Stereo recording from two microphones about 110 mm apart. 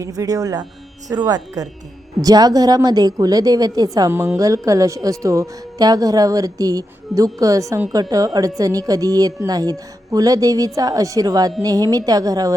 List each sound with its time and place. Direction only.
0.0 s speech: 30° right (ahead or behind)
4.1 s speech: 25° right (ahead or behind)